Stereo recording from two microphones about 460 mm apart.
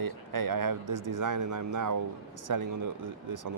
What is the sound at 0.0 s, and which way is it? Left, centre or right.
Speech, right.